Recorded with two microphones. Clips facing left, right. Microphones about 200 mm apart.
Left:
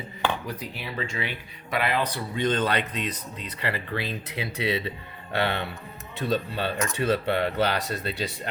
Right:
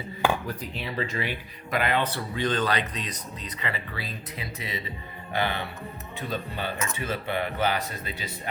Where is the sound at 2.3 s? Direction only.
20° left (ahead or behind).